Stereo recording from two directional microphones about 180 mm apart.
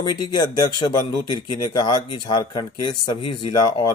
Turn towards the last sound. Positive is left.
turn(degrees=25)  # may be behind; listen again after turning